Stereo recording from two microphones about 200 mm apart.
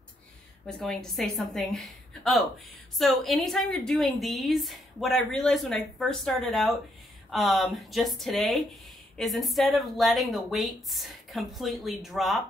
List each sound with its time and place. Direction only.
0.7 s a woman's voice: centre (ahead or behind)